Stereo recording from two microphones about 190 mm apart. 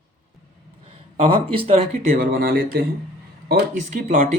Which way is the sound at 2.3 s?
55° right (ahead or behind).